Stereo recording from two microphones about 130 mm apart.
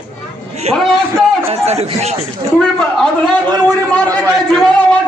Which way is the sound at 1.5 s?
55° right (ahead or behind).